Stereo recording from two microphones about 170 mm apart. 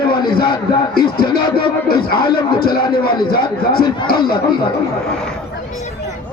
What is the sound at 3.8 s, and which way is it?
Music, 25° left (ahead or behind).